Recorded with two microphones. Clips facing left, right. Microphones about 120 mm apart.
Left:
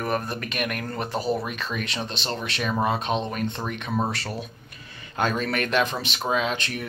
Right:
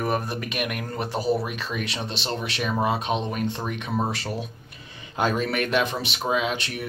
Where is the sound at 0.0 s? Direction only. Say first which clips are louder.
Right 1 dB; 10° right (ahead or behind).